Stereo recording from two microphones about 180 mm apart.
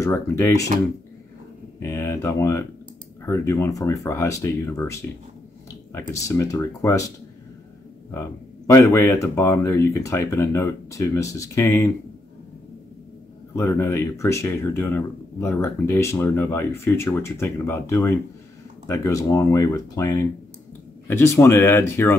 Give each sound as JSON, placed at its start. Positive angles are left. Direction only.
{"t": 0.0, "sound": "speech", "side_deg": 15}
{"t": 1.8, "sound": "speech", "side_deg": 15}
{"t": 8.1, "sound": "a man's voice", "side_deg": 15}
{"t": 13.6, "sound": "speech", "side_deg": 15}